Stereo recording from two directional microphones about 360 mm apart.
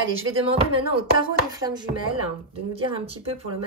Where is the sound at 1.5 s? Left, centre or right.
Centre.